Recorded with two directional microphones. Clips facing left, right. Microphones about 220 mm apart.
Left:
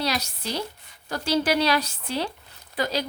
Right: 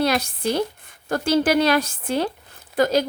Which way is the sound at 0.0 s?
50° right (ahead or behind).